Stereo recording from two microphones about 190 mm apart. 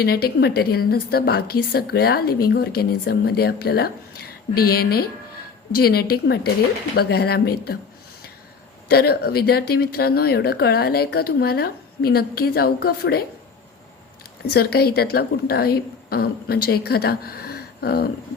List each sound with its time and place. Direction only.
0.0 s a woman's voice: 55° left (ahead or behind)
8.9 s a woman's voice: 55° left (ahead or behind)
14.5 s a woman's voice: 55° left (ahead or behind)